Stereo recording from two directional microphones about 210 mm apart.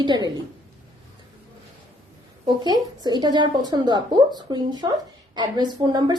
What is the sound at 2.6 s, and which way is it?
A woman's voice, 20° right (ahead or behind).